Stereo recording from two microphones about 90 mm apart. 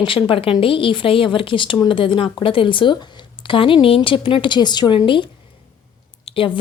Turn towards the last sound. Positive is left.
turn(degrees=75)  # may be behind; listen again after turning